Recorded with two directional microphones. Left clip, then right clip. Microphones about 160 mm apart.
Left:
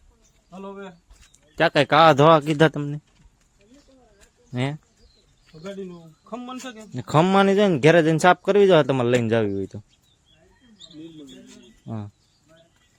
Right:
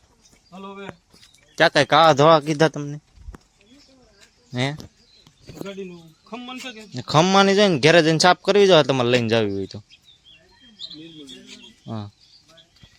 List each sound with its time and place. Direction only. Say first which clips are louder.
0.5 s a man's voice: right 1 dB; centre (ahead or behind); by 3.0 s 20° left (ahead or behind)
4.5 s a man's voice: right 3 dB; centre (ahead or behind)
5.6 s speech: even; 15° left (ahead or behind)
6.9 s a man's voice: right 2 dB; 5° left (ahead or behind)
11.9 s a man's voice: right 2 dB; 5° right (ahead or behind)